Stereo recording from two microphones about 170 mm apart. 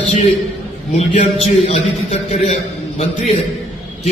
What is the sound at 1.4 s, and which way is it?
A man's voice, 40° left (ahead or behind).